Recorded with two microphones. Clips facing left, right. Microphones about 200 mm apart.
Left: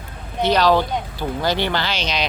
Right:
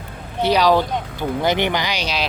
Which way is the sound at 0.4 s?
10° right (ahead or behind).